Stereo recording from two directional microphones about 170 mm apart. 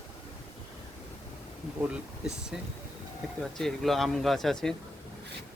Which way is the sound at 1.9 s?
5° right (ahead or behind).